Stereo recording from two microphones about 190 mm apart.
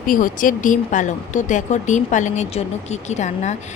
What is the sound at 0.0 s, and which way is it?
Speech, 45° left (ahead or behind).